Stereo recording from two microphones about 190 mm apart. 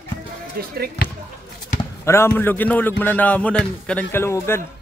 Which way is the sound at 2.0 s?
10° left (ahead or behind).